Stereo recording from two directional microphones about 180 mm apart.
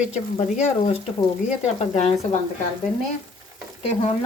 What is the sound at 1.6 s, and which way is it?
Speech, 40° left (ahead or behind).